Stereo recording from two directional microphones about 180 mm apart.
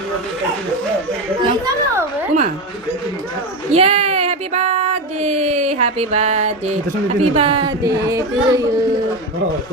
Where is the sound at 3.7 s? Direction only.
35° right (ahead or behind).